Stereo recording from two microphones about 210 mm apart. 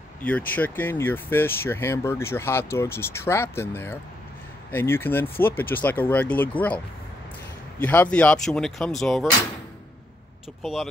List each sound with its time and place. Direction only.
0.2 s speech: 10° left (ahead or behind)
7.8 s speech: 5° left (ahead or behind)
10.6 s speech: centre (ahead or behind)